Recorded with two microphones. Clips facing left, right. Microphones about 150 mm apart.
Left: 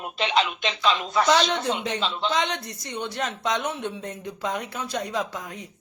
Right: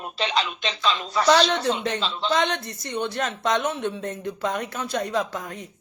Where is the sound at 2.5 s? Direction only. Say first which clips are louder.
Right 3 dB; 10° left (ahead or behind).